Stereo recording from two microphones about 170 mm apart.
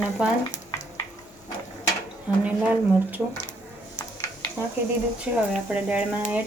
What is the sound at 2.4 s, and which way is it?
Speech, 10° right (ahead or behind).